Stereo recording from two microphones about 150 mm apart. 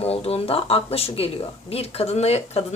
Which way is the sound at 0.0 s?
40° left (ahead or behind).